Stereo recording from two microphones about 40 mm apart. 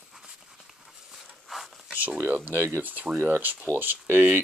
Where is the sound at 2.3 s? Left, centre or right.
Right.